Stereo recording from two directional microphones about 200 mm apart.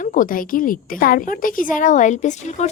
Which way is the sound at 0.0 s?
40° left (ahead or behind).